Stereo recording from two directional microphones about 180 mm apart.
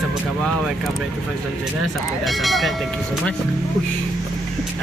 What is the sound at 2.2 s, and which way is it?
Speech, centre (ahead or behind).